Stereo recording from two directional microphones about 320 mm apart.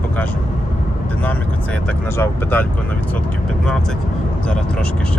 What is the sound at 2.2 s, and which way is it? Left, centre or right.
Speech, centre.